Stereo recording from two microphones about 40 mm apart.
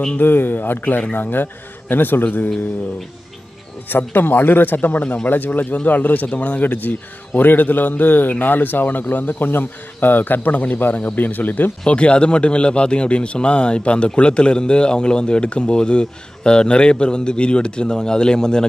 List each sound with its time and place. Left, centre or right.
0.2 s speech: left
3.9 s a man's voice: left
11.8 s a man's voice: left